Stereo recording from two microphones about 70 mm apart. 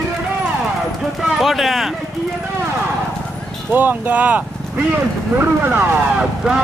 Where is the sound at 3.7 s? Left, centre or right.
Right.